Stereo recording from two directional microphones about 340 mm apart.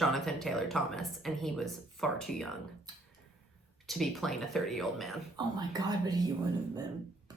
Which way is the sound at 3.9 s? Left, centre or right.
Centre.